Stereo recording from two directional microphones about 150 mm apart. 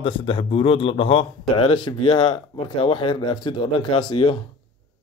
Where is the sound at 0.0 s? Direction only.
35° left (ahead or behind).